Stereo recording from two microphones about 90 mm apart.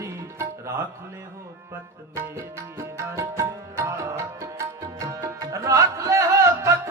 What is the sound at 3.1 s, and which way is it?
Music, 35° right (ahead or behind).